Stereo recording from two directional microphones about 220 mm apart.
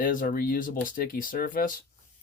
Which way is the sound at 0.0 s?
40° left (ahead or behind).